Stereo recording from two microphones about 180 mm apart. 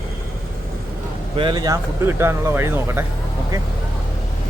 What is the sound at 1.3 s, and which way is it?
Speech, 25° right (ahead or behind).